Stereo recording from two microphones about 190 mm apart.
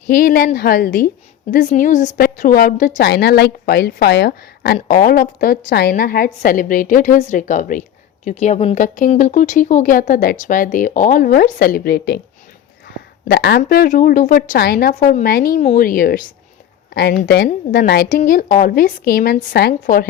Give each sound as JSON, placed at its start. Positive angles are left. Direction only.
{"t": 0.1, "sound": "a woman's voice", "side_deg": 50}
{"t": 12.9, "sound": "a sound", "side_deg": 55}
{"t": 13.6, "sound": "a woman's voice", "side_deg": 50}